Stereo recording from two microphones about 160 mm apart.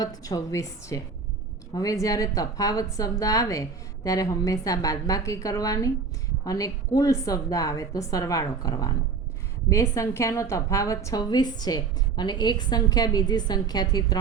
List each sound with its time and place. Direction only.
0.0 s a woman's voice: 20° left (ahead or behind)